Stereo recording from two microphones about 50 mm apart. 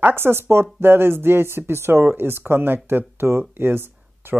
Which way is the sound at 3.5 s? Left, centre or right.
Right.